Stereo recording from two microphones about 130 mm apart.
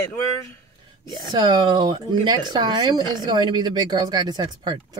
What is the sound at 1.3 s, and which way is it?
Speech, 35° right (ahead or behind).